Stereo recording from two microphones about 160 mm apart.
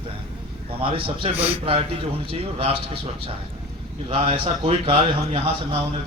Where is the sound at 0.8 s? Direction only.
35° right (ahead or behind).